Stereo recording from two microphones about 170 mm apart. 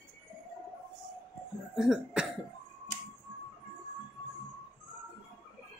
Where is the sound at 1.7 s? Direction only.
Centre (ahead or behind).